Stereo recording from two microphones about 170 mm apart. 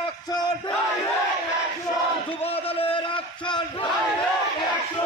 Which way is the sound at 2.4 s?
35° left (ahead or behind).